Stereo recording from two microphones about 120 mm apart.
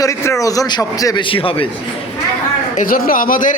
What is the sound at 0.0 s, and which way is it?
A man's voice, 25° left (ahead or behind).